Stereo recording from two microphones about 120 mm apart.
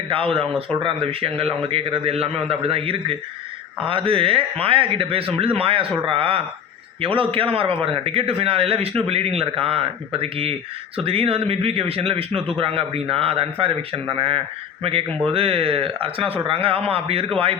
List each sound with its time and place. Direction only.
0.1 s a man's voice: 50° right (ahead or behind)